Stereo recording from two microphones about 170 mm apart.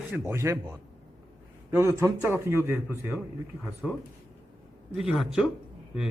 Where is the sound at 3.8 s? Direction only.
Centre (ahead or behind).